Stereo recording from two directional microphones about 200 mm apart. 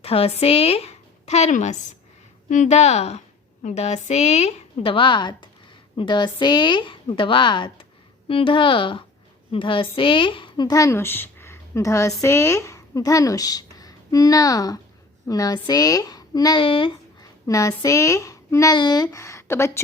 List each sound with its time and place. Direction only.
0.0 s a woman's voice: 30° left (ahead or behind); by 19.8 s 15° left (ahead or behind)